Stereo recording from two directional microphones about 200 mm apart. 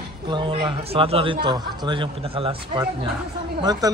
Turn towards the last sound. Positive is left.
turn(degrees=-20)  # may be behind; listen again after turning